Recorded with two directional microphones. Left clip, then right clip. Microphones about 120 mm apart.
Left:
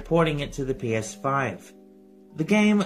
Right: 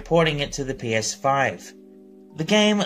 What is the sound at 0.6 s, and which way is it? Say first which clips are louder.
Speech: right 1 dB; 25° right (ahead or behind).